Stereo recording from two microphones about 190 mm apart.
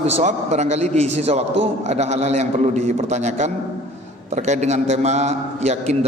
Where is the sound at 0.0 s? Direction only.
35° right (ahead or behind).